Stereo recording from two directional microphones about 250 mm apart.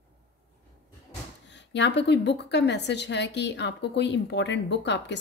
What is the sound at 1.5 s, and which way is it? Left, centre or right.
A woman's voice, left.